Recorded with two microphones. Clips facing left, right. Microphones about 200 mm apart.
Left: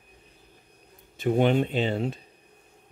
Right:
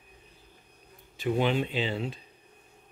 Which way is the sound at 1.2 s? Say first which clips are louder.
Left 5 dB; 50° left (ahead or behind).